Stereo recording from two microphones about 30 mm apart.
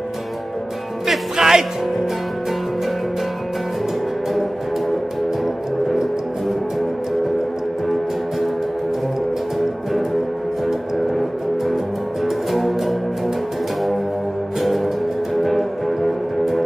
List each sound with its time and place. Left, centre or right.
1.3 s music: centre
10.7 s music: centre
15.4 s music: centre